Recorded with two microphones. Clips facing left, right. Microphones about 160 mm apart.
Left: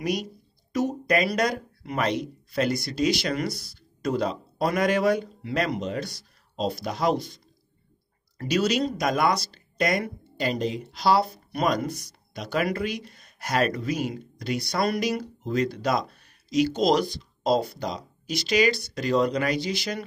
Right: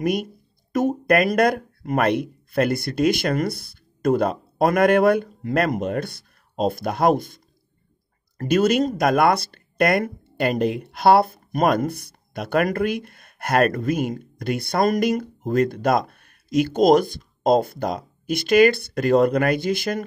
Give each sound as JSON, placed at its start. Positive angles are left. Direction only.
{"t": 0.0, "sound": "speech", "side_deg": -55}